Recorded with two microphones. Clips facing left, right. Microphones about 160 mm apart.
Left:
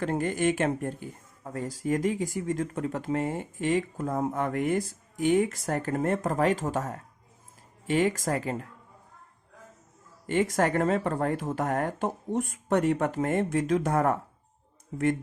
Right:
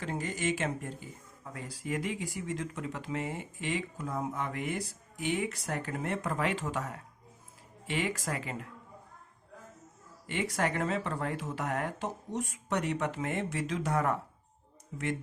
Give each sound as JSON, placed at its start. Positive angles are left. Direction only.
{"t": 0.0, "sound": "speech", "side_deg": 55}
{"t": 1.5, "sound": "speech", "side_deg": 45}
{"t": 10.2, "sound": "speech", "side_deg": 45}